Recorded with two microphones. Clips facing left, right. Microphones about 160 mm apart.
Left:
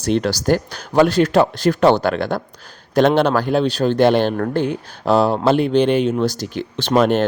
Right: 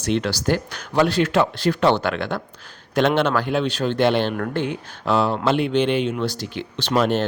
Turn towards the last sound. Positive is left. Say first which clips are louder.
# left 4 dB
turn(degrees=50)  # may be behind; listen again after turning